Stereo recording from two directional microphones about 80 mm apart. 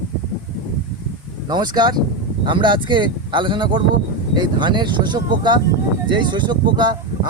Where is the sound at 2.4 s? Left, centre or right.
Right.